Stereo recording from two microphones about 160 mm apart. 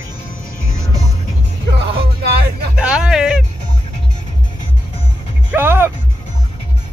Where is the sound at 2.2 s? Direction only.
85° right.